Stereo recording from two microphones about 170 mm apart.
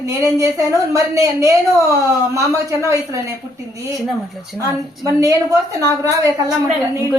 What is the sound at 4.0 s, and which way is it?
Speech, centre (ahead or behind).